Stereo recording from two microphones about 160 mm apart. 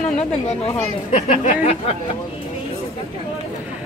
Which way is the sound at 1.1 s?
40° left (ahead or behind).